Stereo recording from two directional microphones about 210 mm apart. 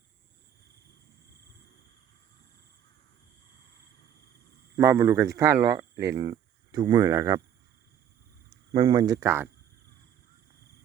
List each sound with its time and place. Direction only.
4.8 s speech: 15° right (ahead or behind)
8.7 s speech: 20° right (ahead or behind)